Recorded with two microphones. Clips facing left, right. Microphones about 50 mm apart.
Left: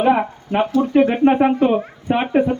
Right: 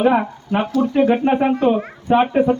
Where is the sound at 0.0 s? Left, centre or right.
Centre.